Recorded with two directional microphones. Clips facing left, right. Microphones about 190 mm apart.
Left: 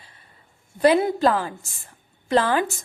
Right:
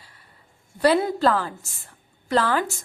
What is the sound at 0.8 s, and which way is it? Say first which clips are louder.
A woman's voice: left 2 dB; 15° left (ahead or behind).